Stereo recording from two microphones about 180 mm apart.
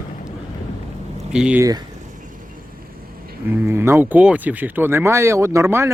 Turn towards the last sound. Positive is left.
turn(degrees=-15)  # may be behind; listen again after turning